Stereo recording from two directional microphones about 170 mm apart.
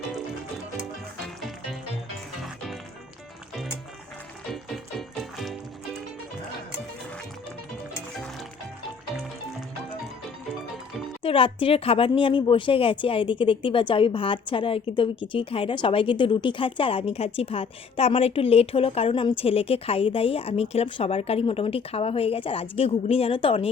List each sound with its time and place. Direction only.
1.4 s music: centre (ahead or behind)
4.5 s music: centre (ahead or behind)
11.2 s speech: 30° left (ahead or behind)